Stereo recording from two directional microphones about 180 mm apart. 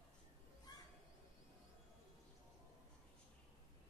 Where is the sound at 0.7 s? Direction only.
20° left (ahead or behind).